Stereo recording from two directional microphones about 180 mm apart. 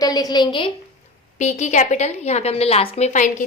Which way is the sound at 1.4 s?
40° left (ahead or behind).